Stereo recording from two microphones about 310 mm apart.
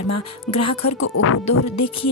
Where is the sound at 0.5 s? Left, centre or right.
Left.